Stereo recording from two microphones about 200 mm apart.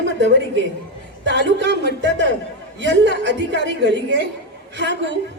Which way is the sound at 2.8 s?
65° right (ahead or behind).